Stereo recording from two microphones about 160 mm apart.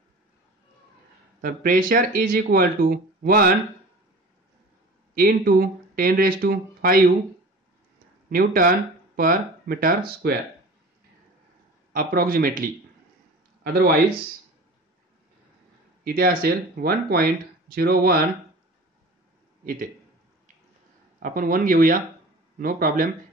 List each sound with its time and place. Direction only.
1.4 s speech: 60° right (ahead or behind)
5.1 s speech: 70° right (ahead or behind)
8.3 s speech: 65° right (ahead or behind)
11.9 s speech: 65° right (ahead or behind)
16.0 s speech: 65° right (ahead or behind)
19.6 s a man's voice: 65° right (ahead or behind)
21.2 s speech: 60° right (ahead or behind)